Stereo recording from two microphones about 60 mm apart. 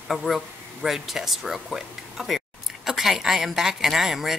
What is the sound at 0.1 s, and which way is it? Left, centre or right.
A man's voice, centre.